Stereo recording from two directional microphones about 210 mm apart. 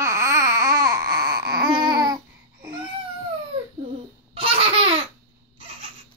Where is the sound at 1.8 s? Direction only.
20° right (ahead or behind).